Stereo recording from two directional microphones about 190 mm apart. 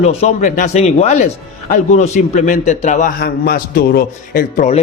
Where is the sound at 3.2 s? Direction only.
50° left (ahead or behind).